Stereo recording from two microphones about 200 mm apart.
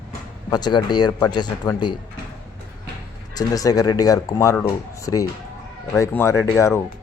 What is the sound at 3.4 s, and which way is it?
Speech, 20° left (ahead or behind).